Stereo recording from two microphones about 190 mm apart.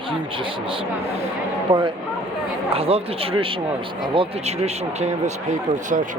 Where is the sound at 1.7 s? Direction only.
30° right (ahead or behind).